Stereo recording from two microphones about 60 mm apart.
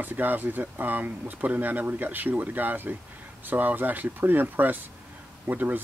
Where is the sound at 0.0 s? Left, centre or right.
Right.